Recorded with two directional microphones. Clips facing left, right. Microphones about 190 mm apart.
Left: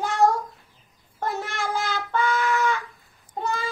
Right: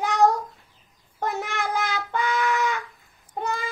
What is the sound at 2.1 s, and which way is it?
Music, 15° right (ahead or behind).